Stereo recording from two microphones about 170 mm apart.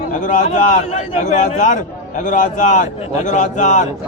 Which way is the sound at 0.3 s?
45° left (ahead or behind).